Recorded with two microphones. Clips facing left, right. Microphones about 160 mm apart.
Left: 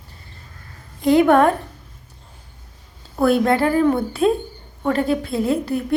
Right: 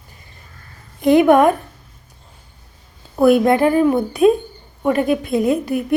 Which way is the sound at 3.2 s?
15° right (ahead or behind).